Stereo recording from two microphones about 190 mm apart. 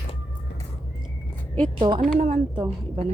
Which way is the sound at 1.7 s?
25° right (ahead or behind).